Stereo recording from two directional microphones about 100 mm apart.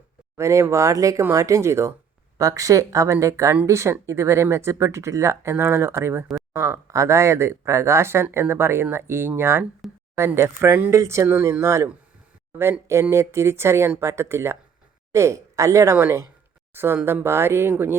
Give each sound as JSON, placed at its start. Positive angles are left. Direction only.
{"t": 0.3, "sound": "speech", "side_deg": -30}
{"t": 12.9, "sound": "speech", "side_deg": -30}